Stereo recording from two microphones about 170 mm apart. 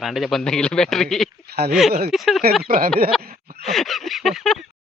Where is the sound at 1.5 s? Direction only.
70° right (ahead or behind).